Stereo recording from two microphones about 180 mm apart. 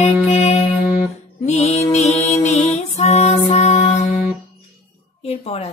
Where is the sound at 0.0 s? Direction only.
40° left (ahead or behind).